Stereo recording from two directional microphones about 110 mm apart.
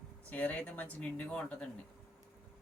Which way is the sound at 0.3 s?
15° left (ahead or behind).